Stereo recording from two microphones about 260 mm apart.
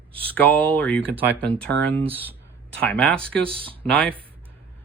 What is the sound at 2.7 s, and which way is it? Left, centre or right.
Speech, centre.